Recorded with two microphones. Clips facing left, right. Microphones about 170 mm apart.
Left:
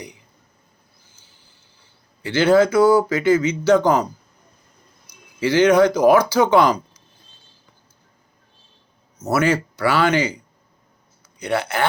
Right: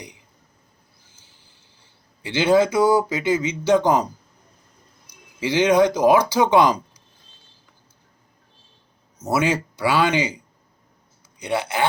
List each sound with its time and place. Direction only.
2.4 s speech: 20° right (ahead or behind)
5.4 s speech: 20° right (ahead or behind)
9.2 s speech: 15° right (ahead or behind)
11.4 s speech: 15° right (ahead or behind)